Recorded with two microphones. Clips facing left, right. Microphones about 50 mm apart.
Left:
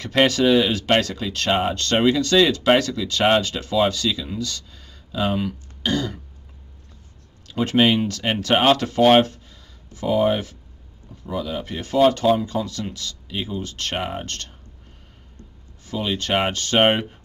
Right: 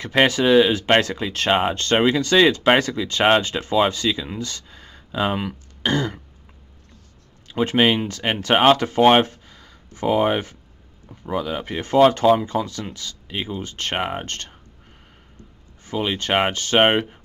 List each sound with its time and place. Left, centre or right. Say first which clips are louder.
0.0 s speech: even; centre
7.4 s speech: even; centre
15.8 s speech: right 1 dB; right